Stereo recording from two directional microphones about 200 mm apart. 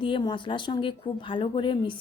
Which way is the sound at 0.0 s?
25° left (ahead or behind).